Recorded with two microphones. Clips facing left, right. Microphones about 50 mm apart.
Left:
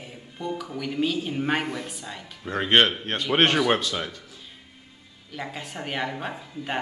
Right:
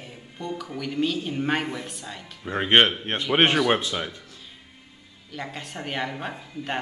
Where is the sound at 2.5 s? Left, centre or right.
Centre.